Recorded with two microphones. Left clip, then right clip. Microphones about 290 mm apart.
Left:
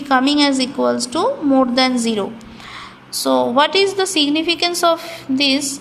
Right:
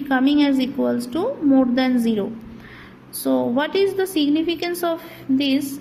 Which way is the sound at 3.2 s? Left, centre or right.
Left.